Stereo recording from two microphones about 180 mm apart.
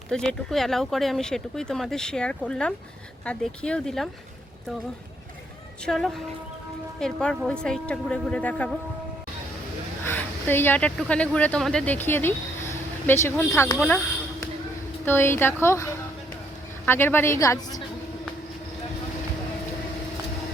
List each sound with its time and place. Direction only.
0.1 s speech: 5° left (ahead or behind)
5.8 s speech: centre (ahead or behind)
10.0 s a woman's voice: 10° left (ahead or behind)
15.0 s a woman's voice: 15° left (ahead or behind)